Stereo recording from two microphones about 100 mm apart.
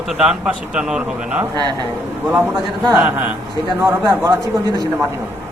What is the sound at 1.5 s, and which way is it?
Speech, 40° right (ahead or behind).